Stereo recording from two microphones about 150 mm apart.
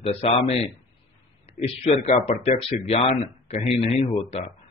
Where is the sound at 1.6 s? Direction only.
60° left (ahead or behind).